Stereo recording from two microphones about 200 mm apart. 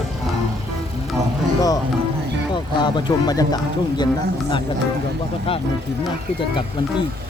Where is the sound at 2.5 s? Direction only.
20° left (ahead or behind).